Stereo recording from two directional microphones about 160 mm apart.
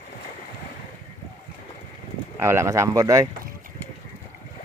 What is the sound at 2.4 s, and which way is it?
Speech, 15° right (ahead or behind).